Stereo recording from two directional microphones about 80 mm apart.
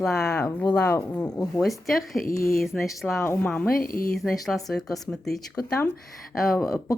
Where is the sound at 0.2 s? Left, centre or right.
Left.